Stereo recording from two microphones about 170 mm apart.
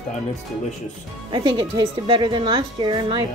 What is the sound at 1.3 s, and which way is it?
A woman's voice, 25° right (ahead or behind).